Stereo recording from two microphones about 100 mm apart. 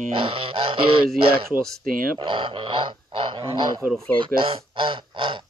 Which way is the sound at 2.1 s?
55° right (ahead or behind).